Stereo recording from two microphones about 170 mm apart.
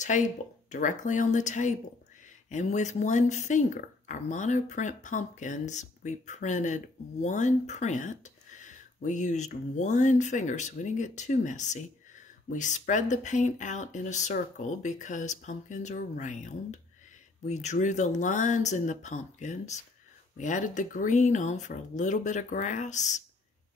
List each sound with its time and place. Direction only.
0.1 s speech: 45° left (ahead or behind)